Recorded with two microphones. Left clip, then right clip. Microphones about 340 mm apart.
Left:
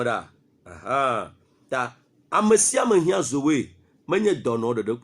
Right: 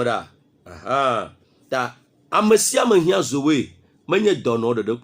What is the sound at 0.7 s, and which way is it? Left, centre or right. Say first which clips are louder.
Speech: right 3 dB; left.